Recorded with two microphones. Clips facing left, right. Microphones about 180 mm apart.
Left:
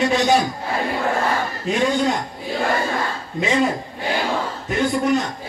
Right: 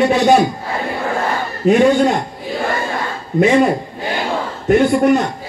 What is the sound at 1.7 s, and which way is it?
Speech, 60° right (ahead or behind).